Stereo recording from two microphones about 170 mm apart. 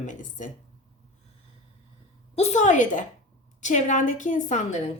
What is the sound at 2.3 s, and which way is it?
A woman's voice, 40° left (ahead or behind).